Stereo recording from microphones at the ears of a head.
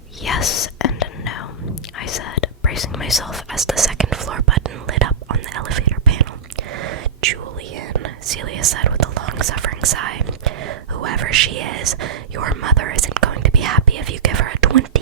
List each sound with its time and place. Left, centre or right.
0.3 s whispering: left
3.8 s whispering: right